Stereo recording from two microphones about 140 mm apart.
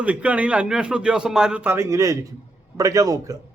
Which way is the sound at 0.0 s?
10° right (ahead or behind).